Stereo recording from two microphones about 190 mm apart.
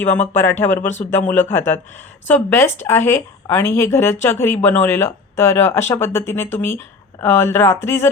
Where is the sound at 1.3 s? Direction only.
10° left (ahead or behind).